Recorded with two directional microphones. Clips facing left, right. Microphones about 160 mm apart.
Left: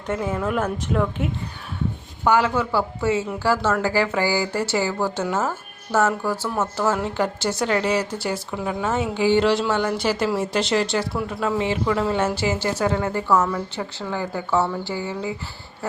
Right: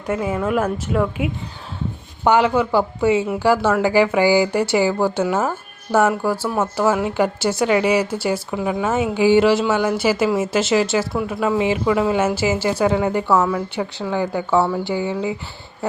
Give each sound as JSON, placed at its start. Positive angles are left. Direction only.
{"t": 0.1, "sound": "a woman's voice", "side_deg": -5}
{"t": 2.2, "sound": "a woman's voice", "side_deg": -20}